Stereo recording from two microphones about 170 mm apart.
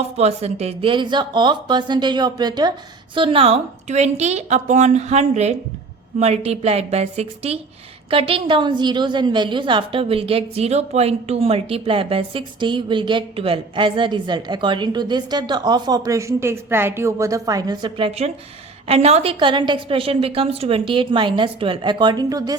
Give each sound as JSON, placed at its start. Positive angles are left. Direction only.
{"t": 0.2, "sound": "a woman's voice", "side_deg": -40}